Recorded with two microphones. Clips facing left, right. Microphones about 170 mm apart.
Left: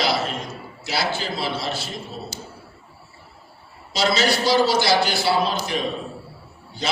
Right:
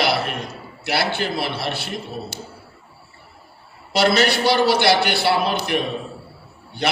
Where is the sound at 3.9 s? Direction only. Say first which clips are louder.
Right 3 dB; 60° right (ahead or behind).